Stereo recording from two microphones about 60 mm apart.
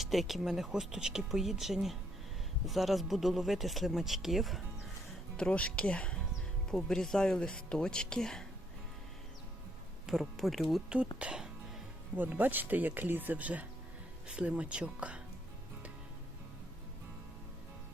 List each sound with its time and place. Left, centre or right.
0.0 s speech: centre
5.4 s speech: left
6.7 s speech: centre
10.1 s speech: centre
10.8 s speech: centre
12.4 s speech: right